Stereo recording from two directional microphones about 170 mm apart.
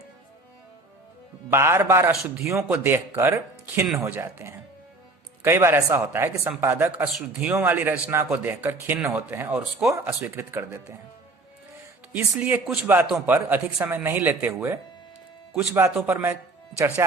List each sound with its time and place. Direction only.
1.5 s speech: 15° right (ahead or behind)
12.1 s speech: 10° right (ahead or behind)